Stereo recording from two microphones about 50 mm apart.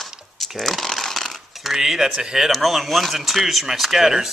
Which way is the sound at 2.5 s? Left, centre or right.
Centre.